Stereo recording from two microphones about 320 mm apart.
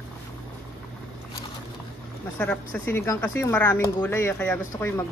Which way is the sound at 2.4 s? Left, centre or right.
Centre.